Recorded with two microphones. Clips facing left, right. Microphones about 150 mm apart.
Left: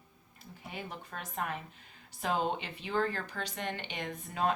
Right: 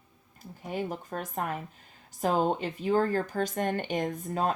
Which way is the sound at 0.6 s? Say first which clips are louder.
Right 10 dB; 45° right (ahead or behind).